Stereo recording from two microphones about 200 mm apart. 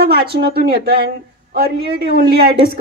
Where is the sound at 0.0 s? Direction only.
50° right (ahead or behind).